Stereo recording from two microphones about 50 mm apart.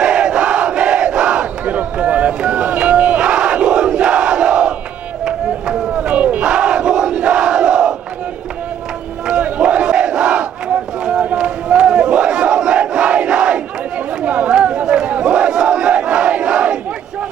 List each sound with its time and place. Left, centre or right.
0.0 s battle cry: centre
9.2 s battle cry: centre
11.0 s a sound: centre
11.3 s battle cry: centre
14.3 s chatter: right
14.8 s a sound: centre
15.2 s battle cry: centre